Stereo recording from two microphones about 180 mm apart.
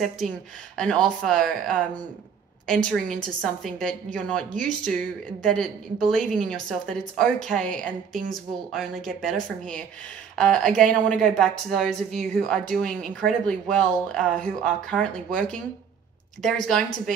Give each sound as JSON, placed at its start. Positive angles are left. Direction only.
{"t": 0.7, "sound": "a woman's voice", "side_deg": 5}